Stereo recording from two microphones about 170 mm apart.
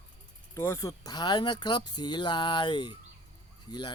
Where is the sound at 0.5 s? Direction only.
15° left (ahead or behind).